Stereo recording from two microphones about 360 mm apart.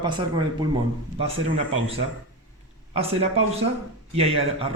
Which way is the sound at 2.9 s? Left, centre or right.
Centre.